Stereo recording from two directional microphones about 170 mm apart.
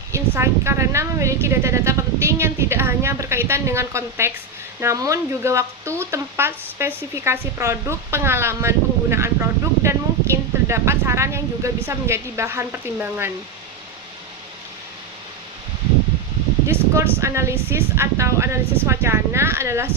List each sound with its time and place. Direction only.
0.1 s speech: 15° right (ahead or behind)
16.6 s speech: 15° right (ahead or behind)